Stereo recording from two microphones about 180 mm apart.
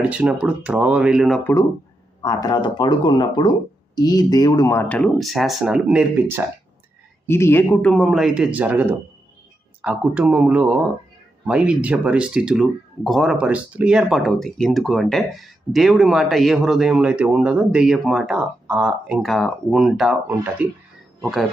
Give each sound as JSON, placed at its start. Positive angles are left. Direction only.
{"t": 0.0, "sound": "speech", "side_deg": -5}
{"t": 2.2, "sound": "speech", "side_deg": 20}
{"t": 7.3, "sound": "speech", "side_deg": 15}